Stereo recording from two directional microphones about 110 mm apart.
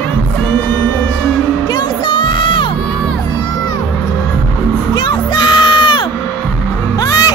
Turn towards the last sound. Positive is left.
turn(degrees=35)  # may be behind; listen again after turning